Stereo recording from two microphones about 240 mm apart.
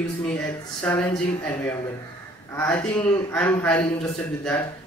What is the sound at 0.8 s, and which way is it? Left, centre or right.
Speech, centre.